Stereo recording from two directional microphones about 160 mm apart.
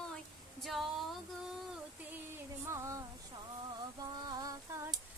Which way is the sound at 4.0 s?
25° right (ahead or behind).